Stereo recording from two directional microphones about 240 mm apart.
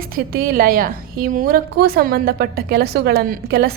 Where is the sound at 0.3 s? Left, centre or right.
Right.